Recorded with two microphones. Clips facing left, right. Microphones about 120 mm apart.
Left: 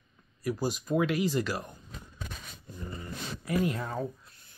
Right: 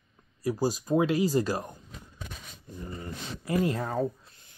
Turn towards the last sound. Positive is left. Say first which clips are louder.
# right 3 dB
turn(degrees=-40)  # may be behind; listen again after turning